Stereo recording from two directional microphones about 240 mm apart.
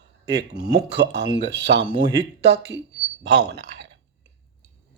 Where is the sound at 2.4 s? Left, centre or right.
Right.